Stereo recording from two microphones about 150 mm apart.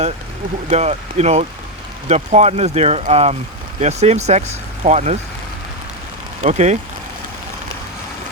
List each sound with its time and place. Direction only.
0.7 s speech: 45° right (ahead or behind)
6.4 s speech: 50° right (ahead or behind)